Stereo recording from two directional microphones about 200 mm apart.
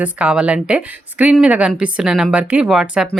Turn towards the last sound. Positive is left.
turn(degrees=-5)  # may be behind; listen again after turning